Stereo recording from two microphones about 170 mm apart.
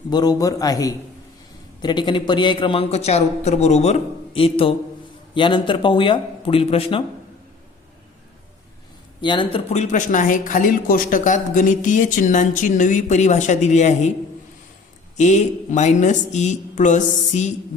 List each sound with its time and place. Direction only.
0.1 s a man's voice: 25° left (ahead or behind)
9.2 s speech: 30° left (ahead or behind)
15.2 s speech: 45° left (ahead or behind)